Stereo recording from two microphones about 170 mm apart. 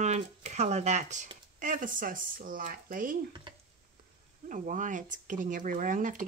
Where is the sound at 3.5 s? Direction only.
30° right (ahead or behind).